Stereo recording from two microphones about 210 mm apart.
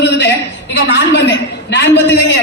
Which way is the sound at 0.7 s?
55° left (ahead or behind).